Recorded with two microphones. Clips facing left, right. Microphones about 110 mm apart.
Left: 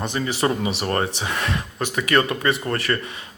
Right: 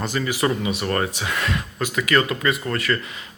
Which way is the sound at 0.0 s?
25° left (ahead or behind).